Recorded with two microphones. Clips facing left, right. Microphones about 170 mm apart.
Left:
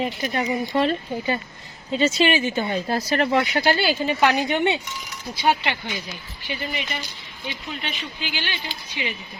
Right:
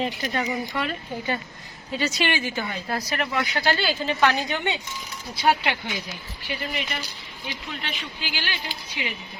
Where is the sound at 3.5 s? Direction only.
20° left (ahead or behind).